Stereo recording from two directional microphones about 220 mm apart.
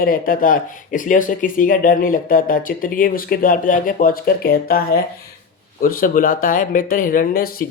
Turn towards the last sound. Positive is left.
turn(degrees=40)  # may be behind; listen again after turning